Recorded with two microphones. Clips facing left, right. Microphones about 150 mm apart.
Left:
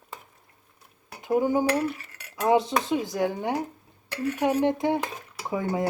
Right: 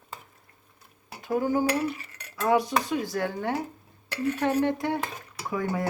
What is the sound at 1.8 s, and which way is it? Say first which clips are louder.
Cutlery: left 1 dB; centre (ahead or behind).